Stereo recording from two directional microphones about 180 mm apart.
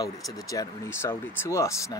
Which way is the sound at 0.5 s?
15° left (ahead or behind).